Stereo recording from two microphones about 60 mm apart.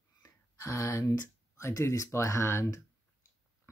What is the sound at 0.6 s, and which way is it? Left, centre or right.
Speech, left.